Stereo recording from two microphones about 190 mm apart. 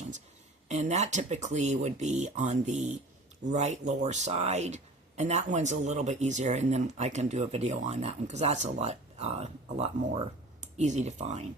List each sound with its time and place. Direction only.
0.7 s speech: 35° right (ahead or behind)